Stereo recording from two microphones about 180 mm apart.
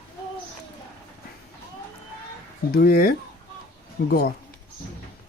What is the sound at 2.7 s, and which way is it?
Speech, 55° left (ahead or behind).